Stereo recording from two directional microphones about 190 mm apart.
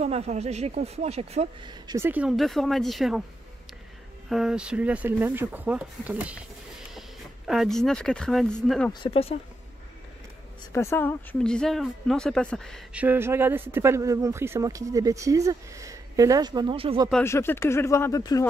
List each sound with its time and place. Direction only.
0.0 s speech: 35° right (ahead or behind)
2.0 s speech: 5° right (ahead or behind)
4.3 s speech: 5° right (ahead or behind)
9.0 s speech: 30° left (ahead or behind)
10.7 s speech: 15° left (ahead or behind)
13.0 s speech: 10° right (ahead or behind); by 17.1 s 30° right (ahead or behind)
17.2 s speech: 15° left (ahead or behind)